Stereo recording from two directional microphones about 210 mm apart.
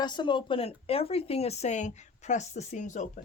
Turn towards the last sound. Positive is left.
turn(degrees=35)  # may be behind; listen again after turning